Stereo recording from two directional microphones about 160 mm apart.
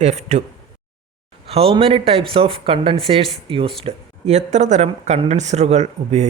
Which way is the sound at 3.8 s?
45° right (ahead or behind).